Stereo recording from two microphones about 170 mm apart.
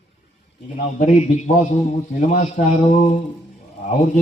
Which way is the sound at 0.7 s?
45° left (ahead or behind).